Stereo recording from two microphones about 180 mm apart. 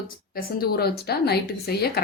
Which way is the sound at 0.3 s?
60° left (ahead or behind).